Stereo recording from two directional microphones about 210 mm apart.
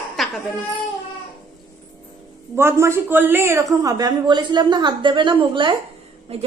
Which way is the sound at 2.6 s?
10° right (ahead or behind).